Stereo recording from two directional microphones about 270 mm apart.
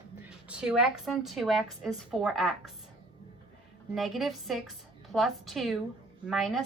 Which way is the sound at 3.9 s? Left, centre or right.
Centre.